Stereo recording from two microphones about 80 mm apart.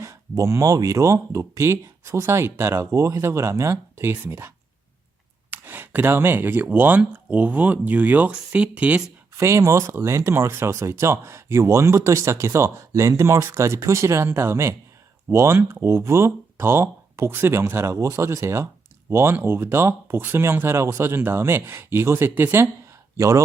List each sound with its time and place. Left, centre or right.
0.0 s speech: right; by 9.0 s centre
9.4 s speech: right